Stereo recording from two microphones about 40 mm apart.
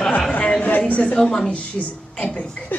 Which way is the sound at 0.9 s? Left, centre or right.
Left.